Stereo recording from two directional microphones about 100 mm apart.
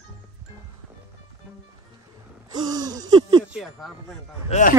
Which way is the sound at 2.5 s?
40° right (ahead or behind).